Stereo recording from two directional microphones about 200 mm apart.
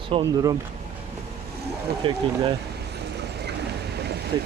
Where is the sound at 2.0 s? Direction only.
25° right (ahead or behind).